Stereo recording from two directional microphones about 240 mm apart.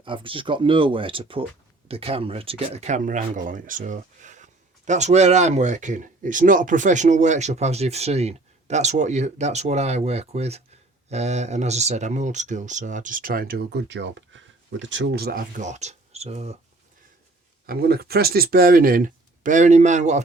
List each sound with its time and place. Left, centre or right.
0.0 s speech: right
17.7 s speech: right